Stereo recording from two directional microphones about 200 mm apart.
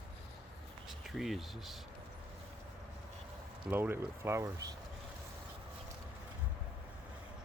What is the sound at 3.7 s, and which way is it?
Speech, 10° right (ahead or behind).